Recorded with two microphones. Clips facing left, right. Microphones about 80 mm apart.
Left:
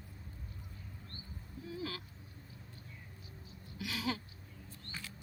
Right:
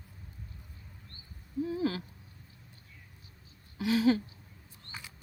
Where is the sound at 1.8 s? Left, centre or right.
Right.